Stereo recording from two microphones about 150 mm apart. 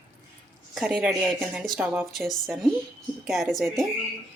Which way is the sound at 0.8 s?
5° right (ahead or behind).